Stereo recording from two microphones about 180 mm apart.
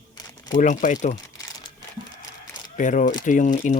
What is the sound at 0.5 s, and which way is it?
Speech, 45° left (ahead or behind).